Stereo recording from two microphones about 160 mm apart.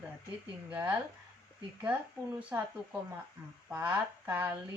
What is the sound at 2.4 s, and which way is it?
Speech, 10° right (ahead or behind).